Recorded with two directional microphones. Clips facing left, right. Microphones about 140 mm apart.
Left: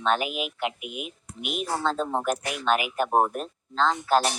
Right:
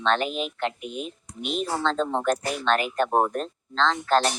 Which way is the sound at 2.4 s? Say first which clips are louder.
Right 3 dB; 35° right (ahead or behind).